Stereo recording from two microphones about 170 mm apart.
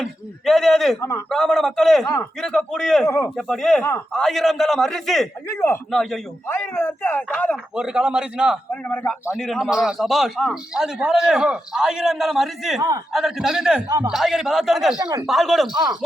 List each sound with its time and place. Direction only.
0.0 s a man's voice: centre (ahead or behind)
3.1 s speech: 15° left (ahead or behind)
3.3 s a man's voice: centre (ahead or behind)
5.5 s speech: 15° left (ahead or behind)
5.9 s a man's voice: centre (ahead or behind)
6.5 s speech: 15° left (ahead or behind)
7.5 s a man's voice: 5° right (ahead or behind)
8.7 s speech: 10° left (ahead or behind)
9.2 s a man's voice: centre (ahead or behind)
13.8 s a man's voice: 20° right (ahead or behind)
14.1 s a man's voice: centre (ahead or behind)
15.7 s a man's voice: 20° right (ahead or behind)